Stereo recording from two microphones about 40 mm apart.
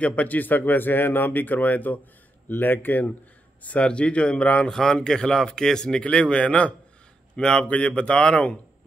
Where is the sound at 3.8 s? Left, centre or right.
Left.